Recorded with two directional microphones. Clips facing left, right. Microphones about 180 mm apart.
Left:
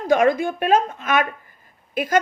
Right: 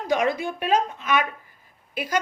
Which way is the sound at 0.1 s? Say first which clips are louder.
Left 6 dB; 50° left (ahead or behind).